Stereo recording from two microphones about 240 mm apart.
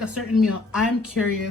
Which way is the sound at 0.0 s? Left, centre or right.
Centre.